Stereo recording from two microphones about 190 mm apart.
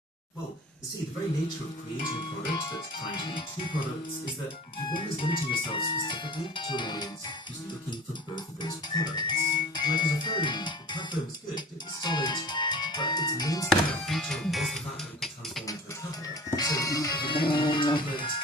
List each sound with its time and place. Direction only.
2.6 s music: 25° left (ahead or behind)
4.9 s music: 25° left (ahead or behind)
8.4 s music: 20° left (ahead or behind)
13.7 s speech: centre (ahead or behind)
16.2 s music: 20° left (ahead or behind)